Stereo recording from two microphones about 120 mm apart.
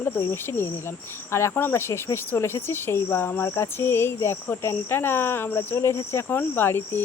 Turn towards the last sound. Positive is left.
turn(degrees=20)  # may be behind; listen again after turning